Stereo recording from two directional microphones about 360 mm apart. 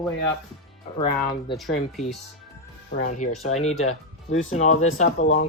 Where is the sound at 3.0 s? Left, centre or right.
Left.